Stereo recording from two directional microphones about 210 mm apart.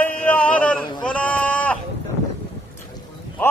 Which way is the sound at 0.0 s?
10° left (ahead or behind).